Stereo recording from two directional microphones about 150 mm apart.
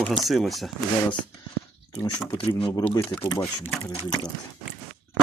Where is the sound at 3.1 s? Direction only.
25° left (ahead or behind).